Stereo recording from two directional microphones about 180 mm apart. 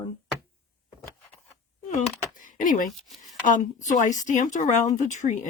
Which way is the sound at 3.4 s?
45° left (ahead or behind).